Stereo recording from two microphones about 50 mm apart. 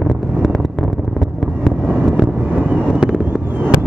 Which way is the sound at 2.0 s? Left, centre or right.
Centre.